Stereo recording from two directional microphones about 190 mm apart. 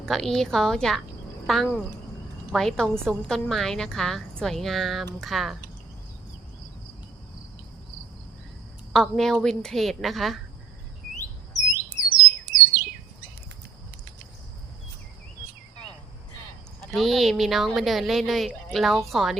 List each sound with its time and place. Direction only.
0.0 s a woman's voice: centre (ahead or behind)
8.9 s a woman's voice: centre (ahead or behind)
12.5 s bird: 50° right (ahead or behind)
16.8 s a woman's voice: centre (ahead or behind)